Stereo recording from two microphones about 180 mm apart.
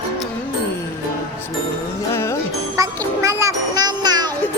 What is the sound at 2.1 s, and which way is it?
Music, 15° left (ahead or behind).